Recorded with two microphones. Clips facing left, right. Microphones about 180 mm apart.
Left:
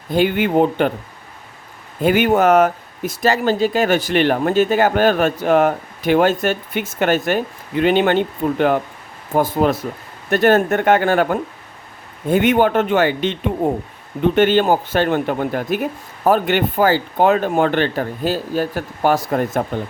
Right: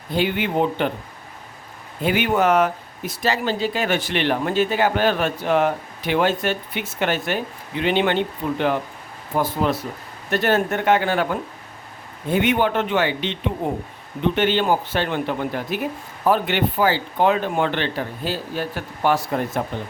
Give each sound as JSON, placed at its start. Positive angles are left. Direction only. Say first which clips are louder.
{"t": 0.1, "sound": "speech", "louder": "left 6 dB", "side_deg": 50}
{"t": 2.0, "sound": "speech", "louder": "left 5 dB", "side_deg": 45}